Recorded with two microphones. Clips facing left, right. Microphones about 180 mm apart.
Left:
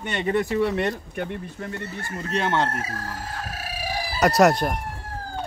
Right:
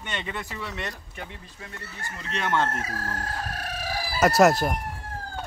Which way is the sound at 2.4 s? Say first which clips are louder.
Left 1 dB; 25° left (ahead or behind).